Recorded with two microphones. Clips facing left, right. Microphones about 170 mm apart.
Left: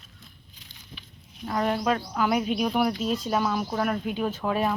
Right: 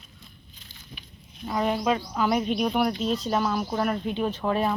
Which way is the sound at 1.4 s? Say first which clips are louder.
Even; 5° right (ahead or behind).